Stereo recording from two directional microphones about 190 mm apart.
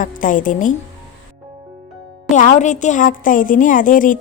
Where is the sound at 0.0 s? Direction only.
45° left (ahead or behind).